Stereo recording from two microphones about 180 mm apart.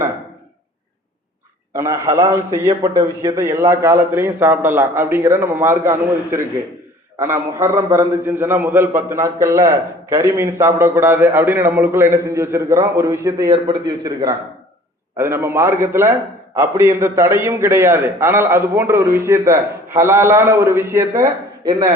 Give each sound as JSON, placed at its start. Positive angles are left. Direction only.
{"t": 1.7, "sound": "a man's voice", "side_deg": -15}
{"t": 13.5, "sound": "a man's voice", "side_deg": -25}
{"t": 15.2, "sound": "a man's voice", "side_deg": -15}
{"t": 21.7, "sound": "a man's voice", "side_deg": -25}